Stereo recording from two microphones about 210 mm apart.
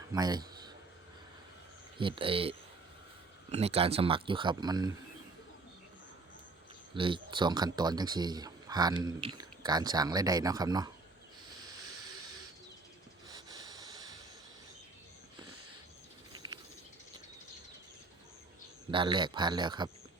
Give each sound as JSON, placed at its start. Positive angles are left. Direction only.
{"t": 0.1, "sound": "a sound", "side_deg": -20}
{"t": 2.0, "sound": "speech", "side_deg": -25}
{"t": 6.9, "sound": "speech", "side_deg": -25}
{"t": 13.3, "sound": "a sound", "side_deg": -15}
{"t": 16.3, "sound": "bird", "side_deg": -20}
{"t": 18.9, "sound": "speech", "side_deg": -20}